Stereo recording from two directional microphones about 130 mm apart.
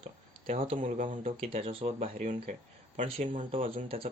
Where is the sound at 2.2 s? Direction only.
70° right (ahead or behind).